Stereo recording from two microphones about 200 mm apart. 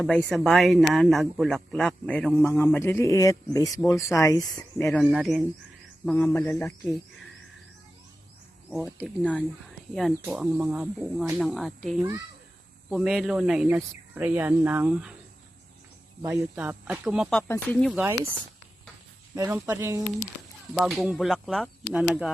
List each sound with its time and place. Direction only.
0.0 s speech: 5° left (ahead or behind)
4.9 s speech: centre (ahead or behind)
8.7 s speech: 5° right (ahead or behind)
16.2 s speech: 10° right (ahead or behind)
19.4 s speech: 15° right (ahead or behind)
20.7 s speech: centre (ahead or behind)